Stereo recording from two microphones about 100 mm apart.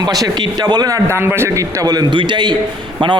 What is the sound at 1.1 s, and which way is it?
A man's voice, 25° right (ahead or behind).